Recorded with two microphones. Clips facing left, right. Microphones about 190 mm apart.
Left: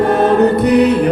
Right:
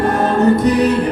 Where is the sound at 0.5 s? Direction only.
65° left (ahead or behind).